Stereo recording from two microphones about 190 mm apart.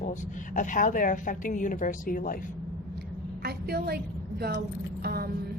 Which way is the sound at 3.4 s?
55° right (ahead or behind).